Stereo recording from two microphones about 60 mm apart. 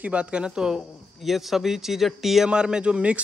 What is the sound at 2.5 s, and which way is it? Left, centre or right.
Speech, centre.